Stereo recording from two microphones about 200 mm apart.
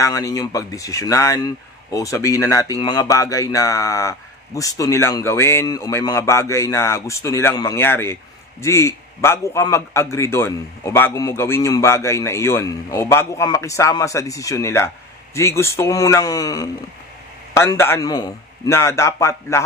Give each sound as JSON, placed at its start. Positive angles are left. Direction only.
{"t": 0.0, "sound": "speech", "side_deg": 15}